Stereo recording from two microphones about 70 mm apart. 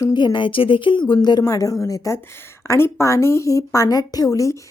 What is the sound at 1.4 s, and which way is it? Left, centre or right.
A woman's voice, left.